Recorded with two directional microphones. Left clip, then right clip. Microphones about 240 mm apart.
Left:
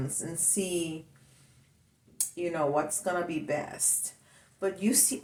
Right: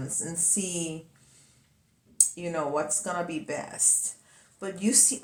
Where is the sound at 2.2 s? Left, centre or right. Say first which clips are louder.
Right 10 dB; centre.